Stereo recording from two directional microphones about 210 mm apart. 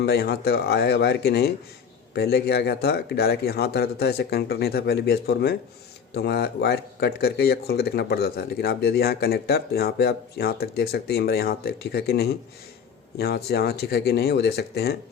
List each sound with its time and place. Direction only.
0.0 s speech: 50° left (ahead or behind)